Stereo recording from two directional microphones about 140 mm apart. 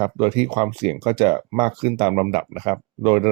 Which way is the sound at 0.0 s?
40° right (ahead or behind).